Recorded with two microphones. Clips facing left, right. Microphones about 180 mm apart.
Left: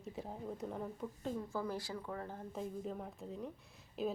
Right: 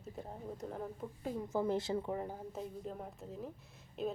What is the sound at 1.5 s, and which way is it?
Speech, 20° right (ahead or behind).